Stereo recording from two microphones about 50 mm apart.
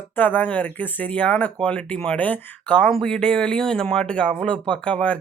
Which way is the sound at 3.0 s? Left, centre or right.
Centre.